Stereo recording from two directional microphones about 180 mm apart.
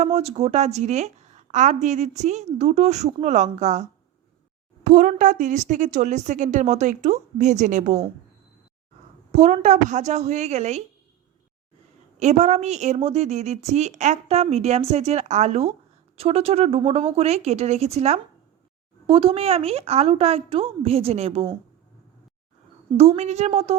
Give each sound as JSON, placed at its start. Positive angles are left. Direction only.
{"t": 0.0, "sound": "a woman's voice", "side_deg": -35}
{"t": 9.3, "sound": "a woman's voice", "side_deg": -40}
{"t": 12.2, "sound": "a woman's voice", "side_deg": -40}
{"t": 23.0, "sound": "a woman's voice", "side_deg": -35}